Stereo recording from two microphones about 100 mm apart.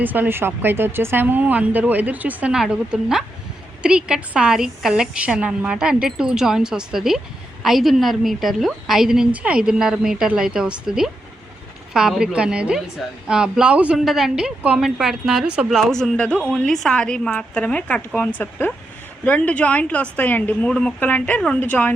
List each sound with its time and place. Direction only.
0.0 s a woman's voice: 20° right (ahead or behind)
15.7 s a woman's voice: 5° left (ahead or behind)